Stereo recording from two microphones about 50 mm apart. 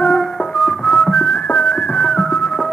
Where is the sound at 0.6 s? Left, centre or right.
Centre.